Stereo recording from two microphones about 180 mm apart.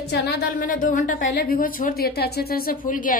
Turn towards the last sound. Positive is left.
turn(degrees=50)  # may be behind; listen again after turning